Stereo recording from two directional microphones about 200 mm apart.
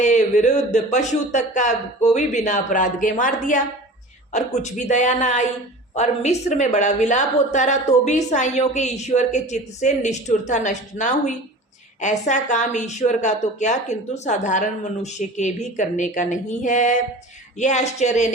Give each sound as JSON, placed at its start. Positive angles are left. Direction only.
{"t": 0.0, "sound": "a woman's voice", "side_deg": 35}